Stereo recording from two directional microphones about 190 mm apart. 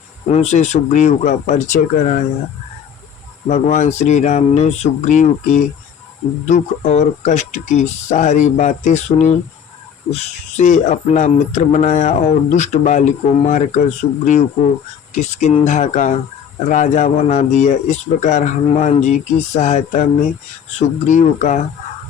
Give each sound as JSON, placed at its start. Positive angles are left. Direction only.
{"t": 0.3, "sound": "speech", "side_deg": 35}
{"t": 3.5, "sound": "speech", "side_deg": 40}